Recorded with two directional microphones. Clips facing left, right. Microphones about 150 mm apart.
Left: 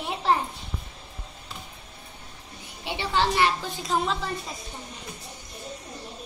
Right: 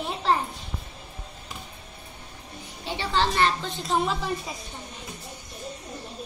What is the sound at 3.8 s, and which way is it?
Speech, centre (ahead or behind).